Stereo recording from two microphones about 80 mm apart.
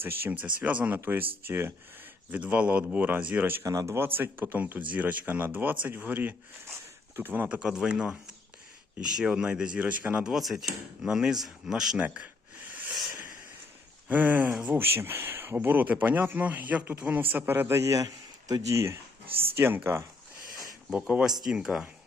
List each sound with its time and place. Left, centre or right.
0.0 s speech: right
3.6 s speech: right
3.9 s speech: right
10.2 s speech: centre
11.9 s speech: centre
12.9 s a sound: centre
14.1 s speech: right
20.9 s speech: centre